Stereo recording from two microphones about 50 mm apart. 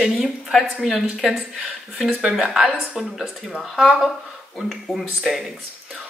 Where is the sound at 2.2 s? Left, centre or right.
Centre.